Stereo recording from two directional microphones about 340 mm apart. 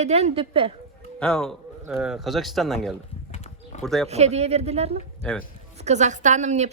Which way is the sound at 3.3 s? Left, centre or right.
Centre.